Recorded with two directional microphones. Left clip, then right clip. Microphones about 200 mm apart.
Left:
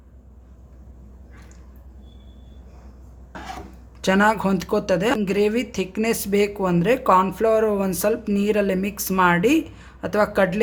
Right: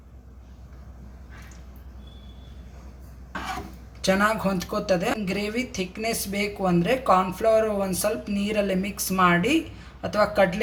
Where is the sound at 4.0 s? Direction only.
45° left (ahead or behind).